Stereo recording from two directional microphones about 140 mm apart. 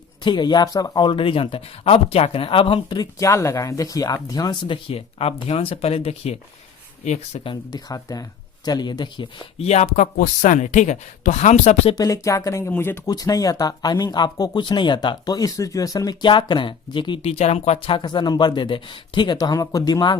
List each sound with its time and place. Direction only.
0.3 s speech: 30° left (ahead or behind)
4.9 s speech: 45° left (ahead or behind)
7.4 s speech: 30° left (ahead or behind)
9.6 s speech: 50° left (ahead or behind)
11.9 s speech: 25° left (ahead or behind)
13.1 s speech: 25° left (ahead or behind)
17.3 s speech: 50° left (ahead or behind); by 20.1 s 30° left (ahead or behind)